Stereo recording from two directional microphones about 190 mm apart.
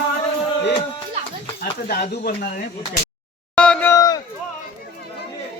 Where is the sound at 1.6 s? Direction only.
55° left (ahead or behind).